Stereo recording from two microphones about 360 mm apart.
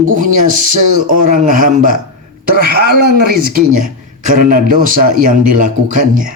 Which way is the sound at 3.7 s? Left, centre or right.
Right.